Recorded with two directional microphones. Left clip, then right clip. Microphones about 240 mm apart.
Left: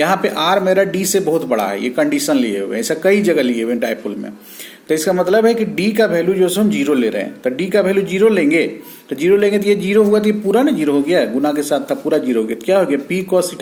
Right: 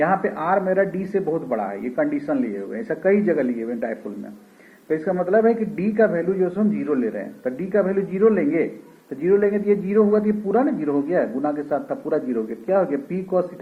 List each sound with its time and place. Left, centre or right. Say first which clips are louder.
0.0 s a man's voice: left 6 dB; left